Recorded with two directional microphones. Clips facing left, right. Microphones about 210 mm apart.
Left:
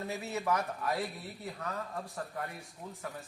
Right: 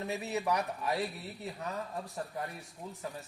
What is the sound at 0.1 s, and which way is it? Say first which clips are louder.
Speech: right 1 dB; 20° right (ahead or behind).